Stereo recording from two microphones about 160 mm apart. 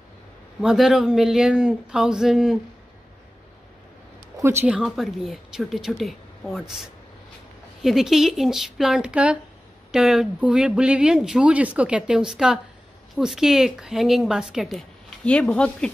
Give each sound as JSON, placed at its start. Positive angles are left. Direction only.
{"t": 0.6, "sound": "a woman's voice", "side_deg": -5}
{"t": 4.4, "sound": "a woman's voice", "side_deg": -15}